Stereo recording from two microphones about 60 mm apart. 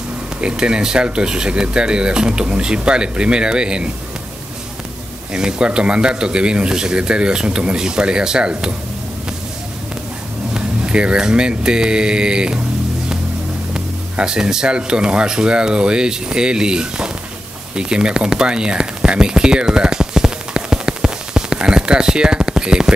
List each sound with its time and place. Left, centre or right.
0.4 s speech: centre
5.3 s speech: centre
10.5 s speech: centre
13.7 s speech: centre
17.7 s a sound: centre